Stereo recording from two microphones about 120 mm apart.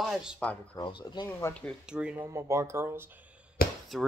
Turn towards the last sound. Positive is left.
turn(degrees=0)  # may be behind; listen again after turning